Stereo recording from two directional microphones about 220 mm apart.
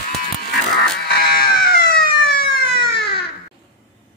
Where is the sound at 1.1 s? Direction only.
45° left (ahead or behind).